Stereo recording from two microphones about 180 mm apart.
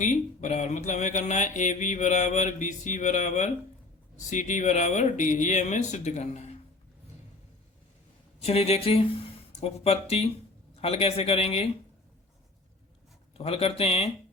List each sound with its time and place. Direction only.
0.0 s speech: 40° left (ahead or behind)
8.4 s speech: 35° left (ahead or behind)
13.3 s speech: 35° left (ahead or behind)